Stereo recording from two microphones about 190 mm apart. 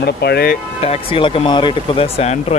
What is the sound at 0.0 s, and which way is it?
Speech, 60° left (ahead or behind).